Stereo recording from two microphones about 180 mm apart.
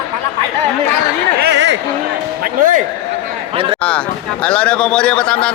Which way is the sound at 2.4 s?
50° right (ahead or behind).